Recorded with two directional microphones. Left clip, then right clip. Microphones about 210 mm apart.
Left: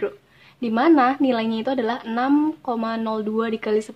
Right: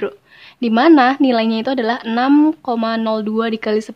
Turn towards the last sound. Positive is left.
turn(degrees=-25)  # may be behind; listen again after turning